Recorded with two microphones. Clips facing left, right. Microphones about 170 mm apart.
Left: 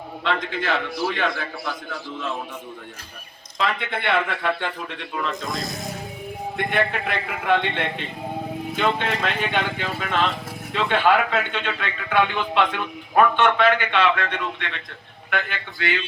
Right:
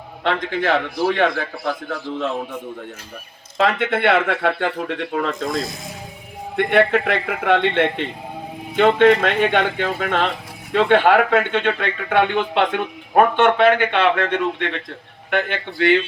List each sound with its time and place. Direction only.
0.6 s a man's voice: 55° right (ahead or behind)
3.6 s speech: 75° right (ahead or behind); by 5.5 s 60° right (ahead or behind)
6.6 s speech: 75° right (ahead or behind)
8.7 s a man's voice: 60° right (ahead or behind)